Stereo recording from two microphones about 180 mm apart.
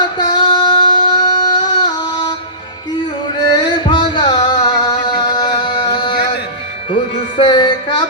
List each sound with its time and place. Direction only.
0.0 s singing: 25° left (ahead or behind)
3.6 s music: 25° left (ahead or behind)